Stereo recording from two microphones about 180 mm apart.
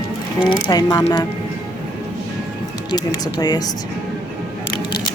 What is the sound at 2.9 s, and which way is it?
Speech, 20° left (ahead or behind).